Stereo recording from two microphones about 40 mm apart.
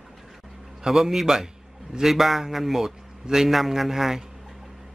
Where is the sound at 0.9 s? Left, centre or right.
Centre.